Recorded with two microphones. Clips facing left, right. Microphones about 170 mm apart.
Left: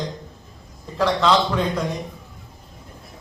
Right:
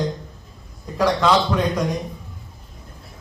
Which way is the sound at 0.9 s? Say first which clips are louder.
Right 1 dB; 10° right (ahead or behind).